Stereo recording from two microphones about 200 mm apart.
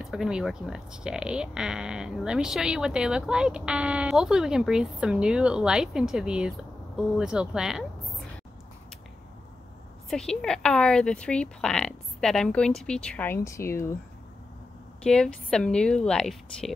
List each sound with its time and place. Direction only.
0.0 s speech: centre (ahead or behind)
10.0 s speech: 5° left (ahead or behind)
15.0 s speech: 5° left (ahead or behind)